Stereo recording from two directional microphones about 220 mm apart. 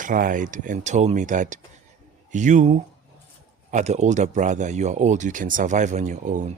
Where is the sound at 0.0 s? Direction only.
35° right (ahead or behind).